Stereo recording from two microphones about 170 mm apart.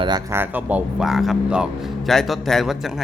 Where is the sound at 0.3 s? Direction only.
15° right (ahead or behind).